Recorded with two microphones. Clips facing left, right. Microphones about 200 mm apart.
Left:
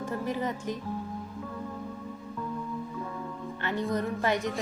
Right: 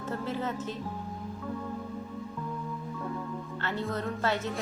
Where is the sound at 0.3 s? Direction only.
15° left (ahead or behind).